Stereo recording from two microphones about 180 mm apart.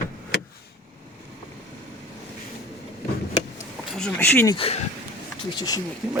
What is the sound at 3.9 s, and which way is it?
Speech, 5° left (ahead or behind).